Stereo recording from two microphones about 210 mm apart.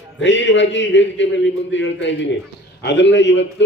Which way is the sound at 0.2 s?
60° left (ahead or behind).